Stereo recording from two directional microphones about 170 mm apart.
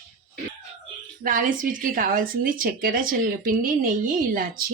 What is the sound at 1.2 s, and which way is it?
Speech, 55° right (ahead or behind).